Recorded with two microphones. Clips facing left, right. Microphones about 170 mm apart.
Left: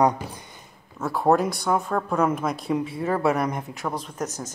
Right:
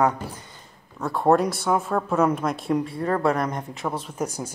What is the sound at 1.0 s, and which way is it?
Speech, centre (ahead or behind).